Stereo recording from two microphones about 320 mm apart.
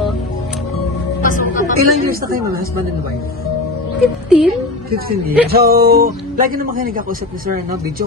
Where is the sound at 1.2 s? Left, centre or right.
Left.